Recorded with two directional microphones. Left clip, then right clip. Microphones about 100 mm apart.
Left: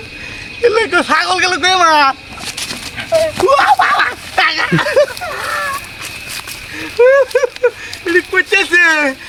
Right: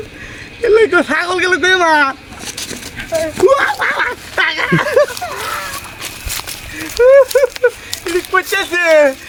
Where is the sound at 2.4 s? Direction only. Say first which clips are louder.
Left 3 dB; 20° right (ahead or behind).